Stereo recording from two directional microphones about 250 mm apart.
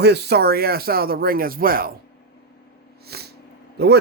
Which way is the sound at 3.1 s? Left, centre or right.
Right.